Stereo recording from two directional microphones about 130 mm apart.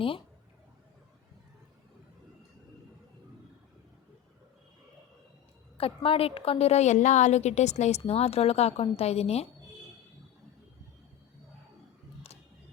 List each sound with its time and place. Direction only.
5.7 s a woman's voice: 45° left (ahead or behind)